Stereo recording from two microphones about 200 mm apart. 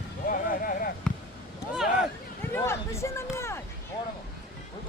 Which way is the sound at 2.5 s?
15° left (ahead or behind).